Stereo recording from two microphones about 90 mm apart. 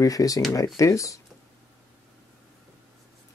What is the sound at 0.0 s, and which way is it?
Speech, 40° left (ahead or behind).